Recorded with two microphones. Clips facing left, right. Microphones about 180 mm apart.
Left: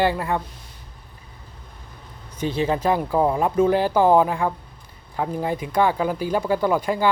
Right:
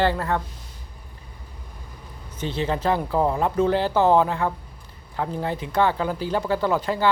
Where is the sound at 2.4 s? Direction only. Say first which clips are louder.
Left 3 dB; 10° left (ahead or behind).